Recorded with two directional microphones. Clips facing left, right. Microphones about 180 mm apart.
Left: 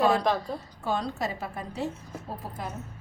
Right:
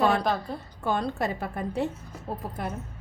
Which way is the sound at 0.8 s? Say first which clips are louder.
Right 3 dB; 55° right (ahead or behind).